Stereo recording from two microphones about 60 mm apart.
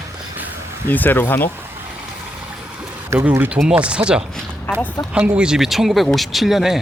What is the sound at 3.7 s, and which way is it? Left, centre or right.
Speech, centre.